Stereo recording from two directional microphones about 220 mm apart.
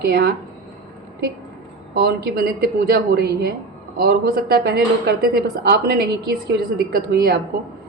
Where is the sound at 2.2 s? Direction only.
45° right (ahead or behind).